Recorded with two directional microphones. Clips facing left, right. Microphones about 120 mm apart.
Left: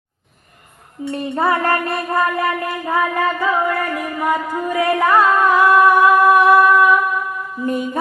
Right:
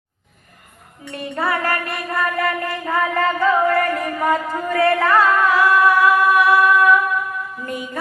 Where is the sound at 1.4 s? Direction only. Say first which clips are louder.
Left 4 dB; 25° left (ahead or behind).